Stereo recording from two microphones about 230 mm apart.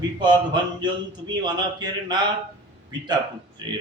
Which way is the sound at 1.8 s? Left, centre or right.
Centre.